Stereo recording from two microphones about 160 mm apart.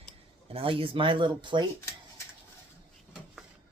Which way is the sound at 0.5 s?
35° right (ahead or behind).